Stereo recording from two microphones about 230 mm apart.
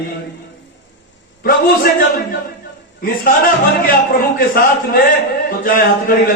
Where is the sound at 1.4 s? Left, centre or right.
Left.